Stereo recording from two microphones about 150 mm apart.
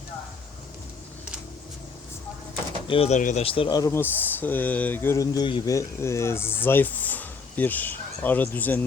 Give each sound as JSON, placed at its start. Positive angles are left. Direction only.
{"t": 2.8, "sound": "speech", "side_deg": 40}
{"t": 3.2, "sound": "speech", "side_deg": 60}
{"t": 3.4, "sound": "speech", "side_deg": 35}
{"t": 3.8, "sound": "speech", "side_deg": 20}
{"t": 5.7, "sound": "speech", "side_deg": 20}